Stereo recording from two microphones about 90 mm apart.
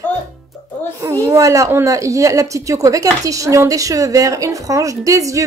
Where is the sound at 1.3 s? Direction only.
35° right (ahead or behind).